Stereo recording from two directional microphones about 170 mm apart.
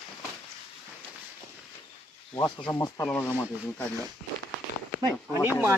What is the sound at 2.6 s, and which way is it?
Speech, 15° left (ahead or behind).